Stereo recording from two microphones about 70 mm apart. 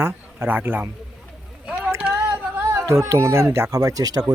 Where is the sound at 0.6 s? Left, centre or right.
Right.